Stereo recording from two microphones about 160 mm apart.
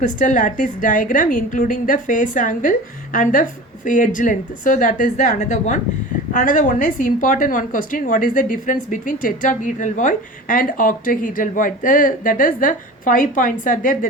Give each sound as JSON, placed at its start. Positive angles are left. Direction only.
{"t": 0.0, "sound": "a woman's voice", "side_deg": 50}